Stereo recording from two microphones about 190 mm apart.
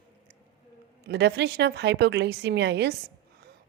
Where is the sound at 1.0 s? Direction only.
60° right (ahead or behind).